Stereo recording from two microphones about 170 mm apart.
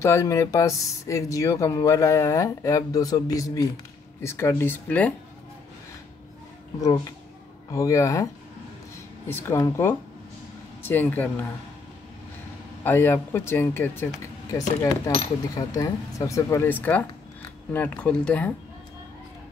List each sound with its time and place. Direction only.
0.0 s speech: 15° left (ahead or behind)
6.8 s speech: 20° left (ahead or behind)
9.3 s speech: 15° left (ahead or behind)
12.8 s speech: 10° left (ahead or behind)